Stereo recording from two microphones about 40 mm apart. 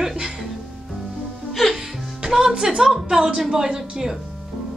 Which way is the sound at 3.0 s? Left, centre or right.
Centre.